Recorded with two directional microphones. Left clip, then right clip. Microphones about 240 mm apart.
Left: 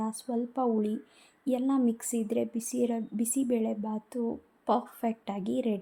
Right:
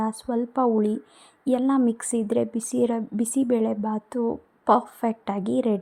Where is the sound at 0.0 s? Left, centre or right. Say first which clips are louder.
Right 7 dB; right.